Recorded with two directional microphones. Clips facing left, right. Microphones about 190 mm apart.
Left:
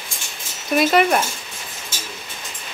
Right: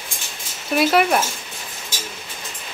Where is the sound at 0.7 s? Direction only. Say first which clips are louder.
Left 1 dB; 5° right (ahead or behind).